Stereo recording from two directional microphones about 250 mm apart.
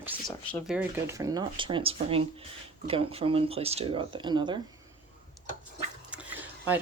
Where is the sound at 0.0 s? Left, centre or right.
Centre.